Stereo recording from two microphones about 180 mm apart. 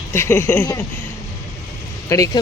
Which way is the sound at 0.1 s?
15° left (ahead or behind).